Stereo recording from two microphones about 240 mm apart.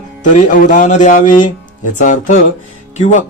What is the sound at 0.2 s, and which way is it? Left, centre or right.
Speech, left.